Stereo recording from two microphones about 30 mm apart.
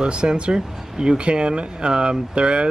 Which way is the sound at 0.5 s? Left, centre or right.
Right.